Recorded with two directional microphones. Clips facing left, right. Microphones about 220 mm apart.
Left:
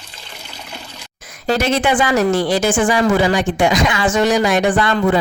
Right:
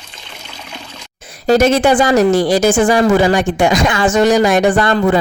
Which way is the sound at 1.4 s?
45° right (ahead or behind).